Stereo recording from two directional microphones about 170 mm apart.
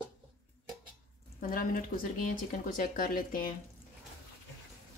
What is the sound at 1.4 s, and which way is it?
Speech, 55° left (ahead or behind).